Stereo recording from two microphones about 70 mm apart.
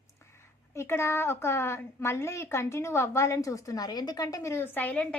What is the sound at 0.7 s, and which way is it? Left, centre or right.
A woman's voice, left.